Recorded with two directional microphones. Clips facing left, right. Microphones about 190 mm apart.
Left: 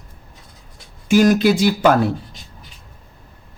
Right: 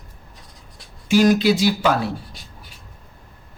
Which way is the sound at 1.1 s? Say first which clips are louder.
Left 2 dB; 50° left (ahead or behind).